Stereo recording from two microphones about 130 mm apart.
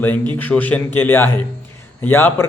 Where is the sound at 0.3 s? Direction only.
15° left (ahead or behind).